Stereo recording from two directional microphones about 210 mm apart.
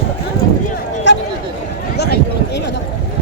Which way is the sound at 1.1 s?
55° left (ahead or behind).